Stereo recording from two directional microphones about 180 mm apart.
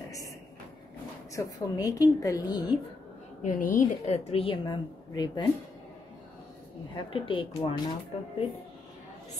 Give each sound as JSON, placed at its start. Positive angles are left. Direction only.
{"t": 1.3, "sound": "a woman's voice", "side_deg": 20}
{"t": 3.4, "sound": "a woman's voice", "side_deg": 50}
{"t": 7.0, "sound": "a woman's voice", "side_deg": 30}